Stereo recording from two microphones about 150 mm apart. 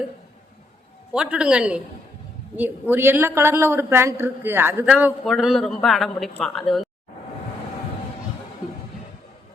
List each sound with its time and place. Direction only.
1.1 s speech: 5° right (ahead or behind)
2.9 s speech: 15° right (ahead or behind); by 6.8 s centre (ahead or behind)